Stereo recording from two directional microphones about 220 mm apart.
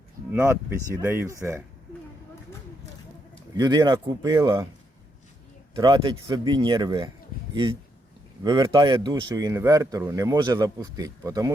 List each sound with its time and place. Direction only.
0.3 s speech: 10° right (ahead or behind)
3.6 s speech: 20° right (ahead or behind)
5.7 s a man's voice: 20° right (ahead or behind)